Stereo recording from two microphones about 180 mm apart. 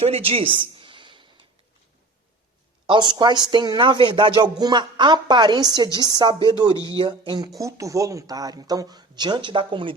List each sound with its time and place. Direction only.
0.0 s a sound: 30° right (ahead or behind)
2.8 s speech: 25° right (ahead or behind)
6.7 s speech: 20° left (ahead or behind)
7.0 s speech: 25° right (ahead or behind)